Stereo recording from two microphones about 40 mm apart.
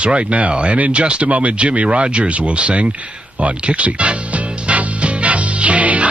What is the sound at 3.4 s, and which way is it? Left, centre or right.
Music, right.